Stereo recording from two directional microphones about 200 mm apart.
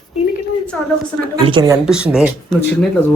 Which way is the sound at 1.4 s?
20° right (ahead or behind).